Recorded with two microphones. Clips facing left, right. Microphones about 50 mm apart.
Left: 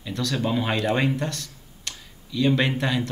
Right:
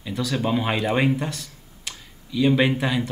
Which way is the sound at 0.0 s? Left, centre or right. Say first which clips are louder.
Right 1 dB; centre.